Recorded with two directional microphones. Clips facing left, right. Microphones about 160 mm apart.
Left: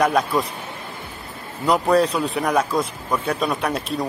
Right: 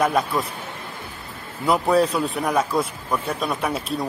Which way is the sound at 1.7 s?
Centre (ahead or behind).